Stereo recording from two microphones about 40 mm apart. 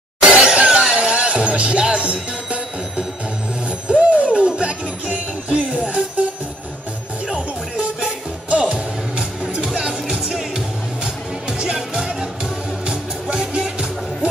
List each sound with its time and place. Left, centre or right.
0.2 s music: centre
7.2 s music: right
9.8 s music: centre